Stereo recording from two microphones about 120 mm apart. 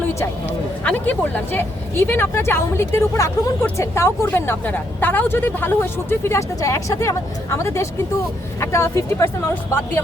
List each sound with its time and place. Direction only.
0.9 s speech: 15° left (ahead or behind)